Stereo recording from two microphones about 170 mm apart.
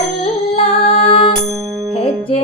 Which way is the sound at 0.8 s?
30° left (ahead or behind).